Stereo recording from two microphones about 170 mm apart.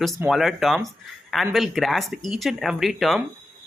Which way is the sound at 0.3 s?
Centre (ahead or behind).